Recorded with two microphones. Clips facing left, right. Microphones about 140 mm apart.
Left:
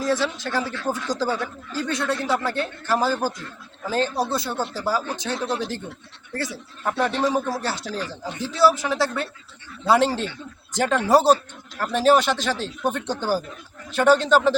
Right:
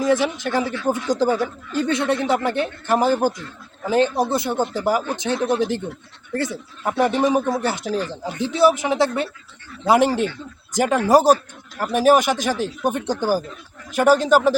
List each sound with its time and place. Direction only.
0.0 s speech: 20° right (ahead or behind)
6.8 s speech: 15° right (ahead or behind)